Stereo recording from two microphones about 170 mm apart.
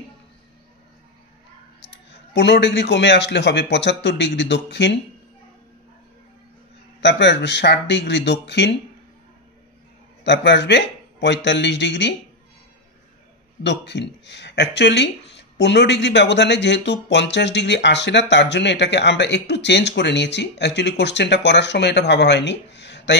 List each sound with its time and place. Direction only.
1.8 s speech: 90° left
7.0 s speech: 90° left
10.2 s speech: 90° left
13.6 s speech: 90° left